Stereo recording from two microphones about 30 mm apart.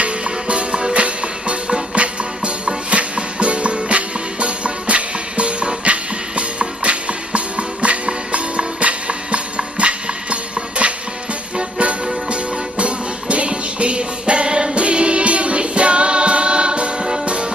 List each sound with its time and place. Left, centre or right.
0.0 s music: right
14.8 s music: right